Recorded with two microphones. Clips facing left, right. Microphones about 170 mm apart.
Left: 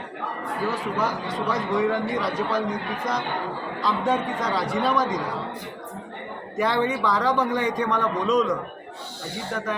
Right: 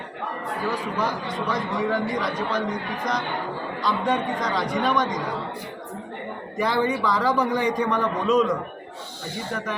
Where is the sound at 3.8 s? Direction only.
5° left (ahead or behind).